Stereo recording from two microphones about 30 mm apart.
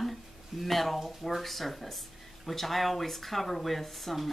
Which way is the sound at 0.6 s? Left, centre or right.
Centre.